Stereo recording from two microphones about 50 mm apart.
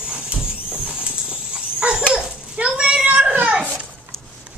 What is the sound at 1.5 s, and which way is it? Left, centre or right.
Dog, centre.